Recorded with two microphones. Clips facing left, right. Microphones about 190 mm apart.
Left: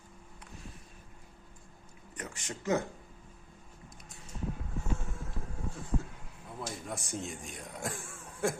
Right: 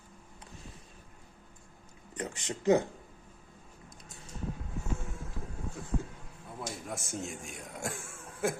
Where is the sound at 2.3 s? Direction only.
20° right (ahead or behind).